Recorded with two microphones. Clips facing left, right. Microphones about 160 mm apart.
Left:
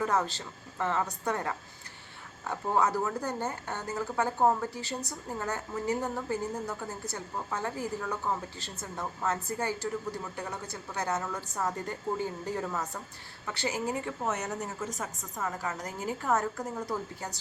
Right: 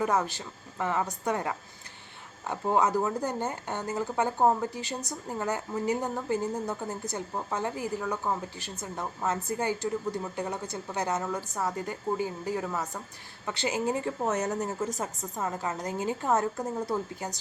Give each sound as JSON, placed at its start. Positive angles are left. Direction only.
{"t": 0.0, "sound": "a woman's voice", "side_deg": -10}
{"t": 14.0, "sound": "a woman's voice", "side_deg": -40}